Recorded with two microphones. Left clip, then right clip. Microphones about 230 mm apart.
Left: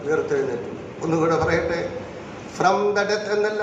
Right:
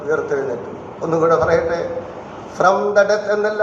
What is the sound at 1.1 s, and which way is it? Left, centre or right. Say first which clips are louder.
A man's voice: right 6 dB; left.